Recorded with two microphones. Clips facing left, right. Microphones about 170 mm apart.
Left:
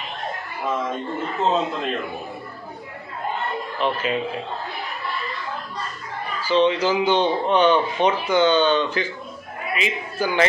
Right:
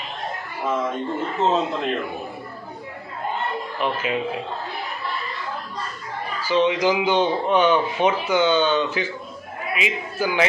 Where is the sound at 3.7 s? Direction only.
10° right (ahead or behind).